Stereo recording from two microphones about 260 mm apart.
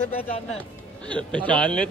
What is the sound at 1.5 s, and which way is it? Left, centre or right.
Speech, centre.